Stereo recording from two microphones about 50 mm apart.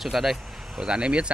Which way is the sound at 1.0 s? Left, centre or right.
Right.